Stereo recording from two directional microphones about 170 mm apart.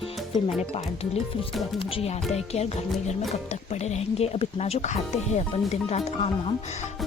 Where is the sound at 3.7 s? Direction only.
40° left (ahead or behind).